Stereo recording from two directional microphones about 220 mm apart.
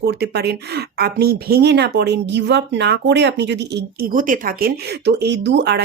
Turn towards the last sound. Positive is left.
turn(degrees=-50)  # may be behind; listen again after turning